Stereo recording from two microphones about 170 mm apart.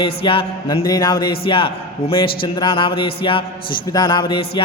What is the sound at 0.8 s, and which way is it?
A man's voice, 20° left (ahead or behind).